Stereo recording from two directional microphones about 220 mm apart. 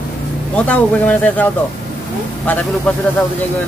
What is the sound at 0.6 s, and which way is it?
Speech, 5° left (ahead or behind).